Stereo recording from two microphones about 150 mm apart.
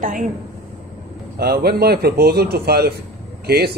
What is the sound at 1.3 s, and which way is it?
Speech, 90° right.